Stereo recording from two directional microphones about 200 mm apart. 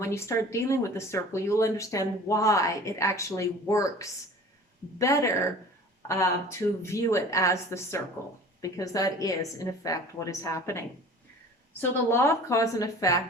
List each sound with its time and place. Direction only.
0.0 s speech: 15° left (ahead or behind)
6.8 s speech: 15° left (ahead or behind)